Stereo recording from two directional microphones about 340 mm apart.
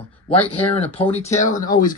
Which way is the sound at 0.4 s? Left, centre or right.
Centre.